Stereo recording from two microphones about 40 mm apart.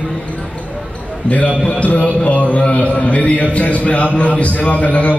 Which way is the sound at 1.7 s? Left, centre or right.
Left.